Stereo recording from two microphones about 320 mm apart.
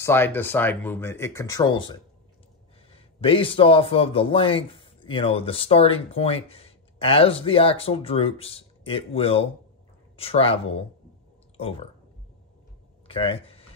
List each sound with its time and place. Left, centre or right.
0.0 s a man's voice: centre
3.2 s a man's voice: centre
11.5 s a sound: centre
13.1 s speech: centre